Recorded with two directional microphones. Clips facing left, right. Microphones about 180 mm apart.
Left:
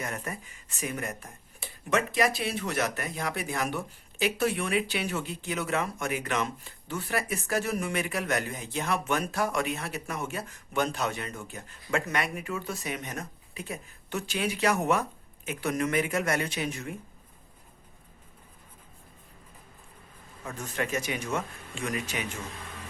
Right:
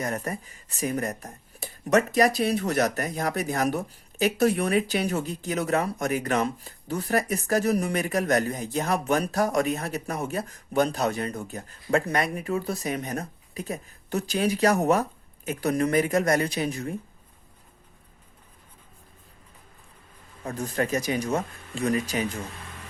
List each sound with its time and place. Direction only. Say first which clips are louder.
0.0 s speech: right 6 dB; 40° right (ahead or behind)
20.4 s speech: right 6 dB; 35° right (ahead or behind)